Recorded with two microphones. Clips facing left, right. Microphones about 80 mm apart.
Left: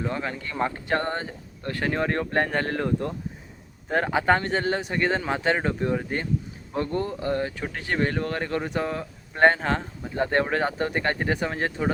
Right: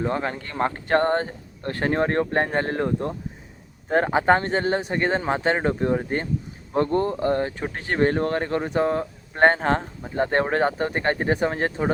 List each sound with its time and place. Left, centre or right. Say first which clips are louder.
0.0 s speech: right 4 dB; right